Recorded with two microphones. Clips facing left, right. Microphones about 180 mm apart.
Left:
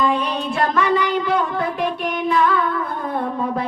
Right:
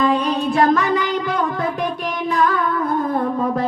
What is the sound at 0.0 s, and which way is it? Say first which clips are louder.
Music: right 3 dB; 45° right (ahead or behind).